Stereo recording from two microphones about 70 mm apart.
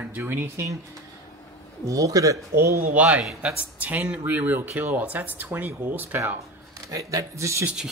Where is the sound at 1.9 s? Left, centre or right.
Right.